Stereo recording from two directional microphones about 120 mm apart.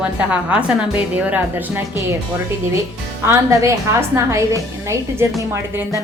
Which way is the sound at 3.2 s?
25° right (ahead or behind).